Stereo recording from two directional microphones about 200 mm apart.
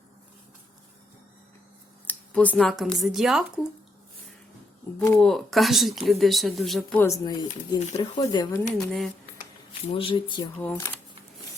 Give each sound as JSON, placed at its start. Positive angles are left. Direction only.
{"t": 2.0, "sound": "speech", "side_deg": 5}
{"t": 4.9, "sound": "speech", "side_deg": 10}
{"t": 5.2, "sound": "speech", "side_deg": 0}
{"t": 7.0, "sound": "speech", "side_deg": 15}
{"t": 7.8, "sound": "speech", "side_deg": 35}
{"t": 8.2, "sound": "speech", "side_deg": 20}
{"t": 8.8, "sound": "speech", "side_deg": 0}
{"t": 9.9, "sound": "speech", "side_deg": 25}
{"t": 10.6, "sound": "speech", "side_deg": 10}